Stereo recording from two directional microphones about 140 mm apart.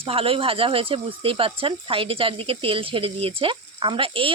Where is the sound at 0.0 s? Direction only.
40° right (ahead or behind).